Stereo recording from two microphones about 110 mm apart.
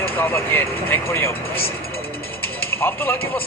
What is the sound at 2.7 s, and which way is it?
Speech, 20° left (ahead or behind).